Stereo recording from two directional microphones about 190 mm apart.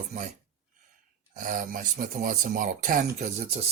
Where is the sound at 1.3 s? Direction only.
45° right (ahead or behind).